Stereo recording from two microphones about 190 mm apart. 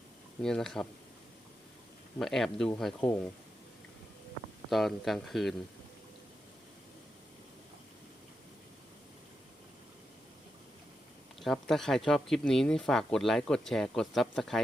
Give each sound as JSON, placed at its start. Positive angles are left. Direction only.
{"t": 0.4, "sound": "speech", "side_deg": 5}
{"t": 2.1, "sound": "speech", "side_deg": 0}
{"t": 4.7, "sound": "speech", "side_deg": 0}
{"t": 11.3, "sound": "speech", "side_deg": 0}